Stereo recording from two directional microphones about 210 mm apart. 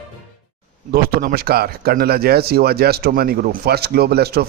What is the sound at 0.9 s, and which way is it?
Speech, 45° right (ahead or behind).